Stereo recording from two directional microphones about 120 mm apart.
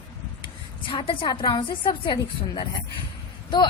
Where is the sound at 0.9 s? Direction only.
45° left (ahead or behind).